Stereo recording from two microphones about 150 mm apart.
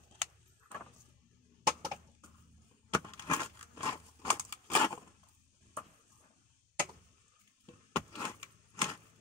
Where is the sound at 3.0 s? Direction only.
20° left (ahead or behind).